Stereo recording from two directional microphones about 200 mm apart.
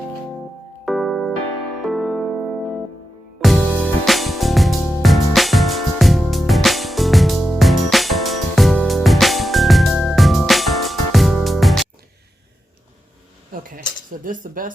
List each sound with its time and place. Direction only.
0.9 s keyboard: centre (ahead or behind)
1.8 s music: centre (ahead or behind)
13.5 s cutlery: 45° right (ahead or behind)